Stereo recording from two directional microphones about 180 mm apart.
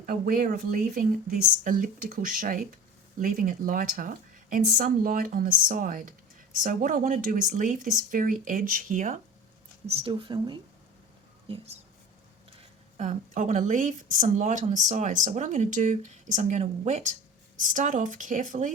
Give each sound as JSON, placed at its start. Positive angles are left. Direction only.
{"t": 0.0, "sound": "a woman's voice", "side_deg": -50}
{"t": 9.8, "sound": "speech", "side_deg": -30}
{"t": 13.0, "sound": "a woman's voice", "side_deg": -40}